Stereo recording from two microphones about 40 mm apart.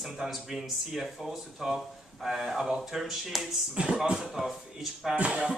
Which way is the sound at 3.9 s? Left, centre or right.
Centre.